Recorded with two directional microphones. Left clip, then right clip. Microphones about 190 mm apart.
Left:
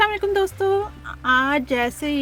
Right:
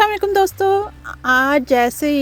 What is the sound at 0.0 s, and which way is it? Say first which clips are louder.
Speech: right 5 dB; 45° right (ahead or behind).